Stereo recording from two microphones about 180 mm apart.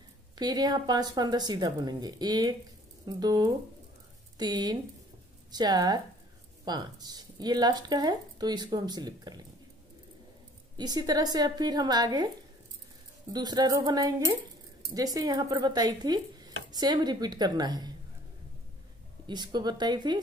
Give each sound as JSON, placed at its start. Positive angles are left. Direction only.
{"t": 0.4, "sound": "speech", "side_deg": -20}
{"t": 10.8, "sound": "speech", "side_deg": -20}
{"t": 13.3, "sound": "speech", "side_deg": -25}
{"t": 19.2, "sound": "speech", "side_deg": -25}